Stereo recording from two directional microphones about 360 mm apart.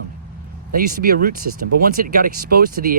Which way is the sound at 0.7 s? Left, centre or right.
Right.